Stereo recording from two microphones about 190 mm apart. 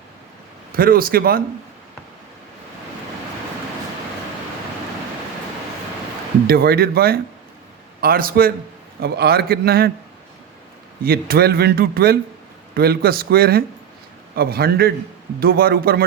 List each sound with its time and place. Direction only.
0.7 s speech: 50° right (ahead or behind)
6.5 s a man's voice: 55° right (ahead or behind)
11.0 s speech: 50° right (ahead or behind)